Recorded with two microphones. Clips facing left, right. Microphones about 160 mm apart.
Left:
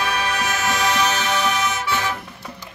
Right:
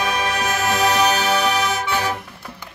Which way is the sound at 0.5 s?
40° right (ahead or behind).